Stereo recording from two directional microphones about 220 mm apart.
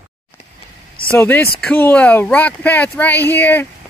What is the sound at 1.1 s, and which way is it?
Speech, 10° left (ahead or behind).